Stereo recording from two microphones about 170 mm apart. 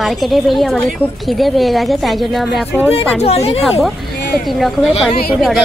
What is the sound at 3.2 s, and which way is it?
Speech, 40° left (ahead or behind).